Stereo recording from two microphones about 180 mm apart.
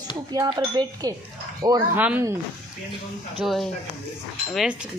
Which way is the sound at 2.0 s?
10° right (ahead or behind).